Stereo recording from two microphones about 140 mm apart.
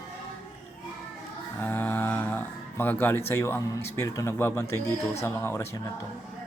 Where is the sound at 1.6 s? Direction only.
15° left (ahead or behind).